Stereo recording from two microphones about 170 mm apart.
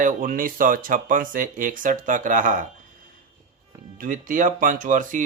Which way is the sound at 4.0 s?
50° right (ahead or behind).